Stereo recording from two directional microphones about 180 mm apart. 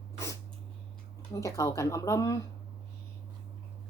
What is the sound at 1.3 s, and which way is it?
Speech, 15° left (ahead or behind).